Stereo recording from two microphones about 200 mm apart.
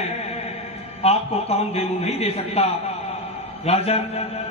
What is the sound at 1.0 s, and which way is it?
A man's voice, 30° left (ahead or behind).